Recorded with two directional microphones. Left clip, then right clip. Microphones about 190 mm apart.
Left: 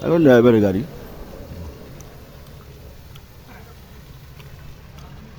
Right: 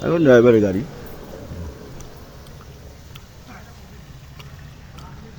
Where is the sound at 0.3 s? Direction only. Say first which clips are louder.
Right 2 dB; 25° left (ahead or behind).